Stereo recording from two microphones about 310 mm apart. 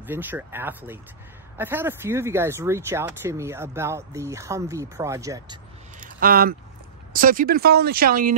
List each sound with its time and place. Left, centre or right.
0.0 s speech: centre
6.0 s speech: right